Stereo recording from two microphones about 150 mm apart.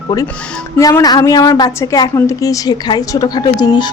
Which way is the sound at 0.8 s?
25° left (ahead or behind).